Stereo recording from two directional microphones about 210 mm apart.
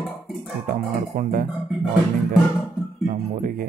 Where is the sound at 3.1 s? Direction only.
40° right (ahead or behind).